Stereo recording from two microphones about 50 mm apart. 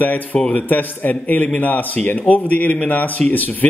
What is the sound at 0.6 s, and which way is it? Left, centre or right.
A man's voice, left.